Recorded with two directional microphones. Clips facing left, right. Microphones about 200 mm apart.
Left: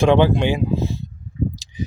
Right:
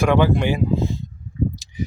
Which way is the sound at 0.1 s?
20° left (ahead or behind).